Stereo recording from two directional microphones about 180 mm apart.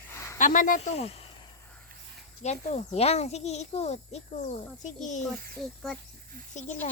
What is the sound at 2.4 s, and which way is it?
Speech, 40° left (ahead or behind).